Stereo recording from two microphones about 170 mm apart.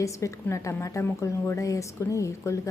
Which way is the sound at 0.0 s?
20° left (ahead or behind).